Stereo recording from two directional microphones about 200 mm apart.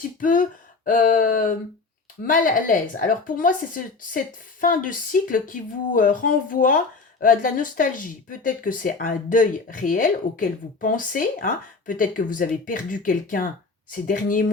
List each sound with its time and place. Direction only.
0.2 s speech: 40° left (ahead or behind)